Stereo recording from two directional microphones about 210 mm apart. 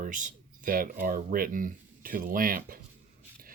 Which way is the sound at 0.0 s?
40° right (ahead or behind).